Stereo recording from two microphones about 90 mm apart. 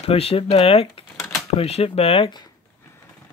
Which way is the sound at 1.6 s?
90° left.